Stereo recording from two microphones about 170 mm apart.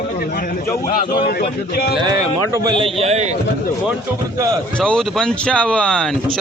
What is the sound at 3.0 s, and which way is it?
Speech, 40° right (ahead or behind).